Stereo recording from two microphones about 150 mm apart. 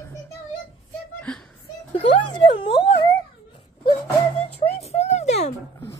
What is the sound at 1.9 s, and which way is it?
Speech, 35° left (ahead or behind).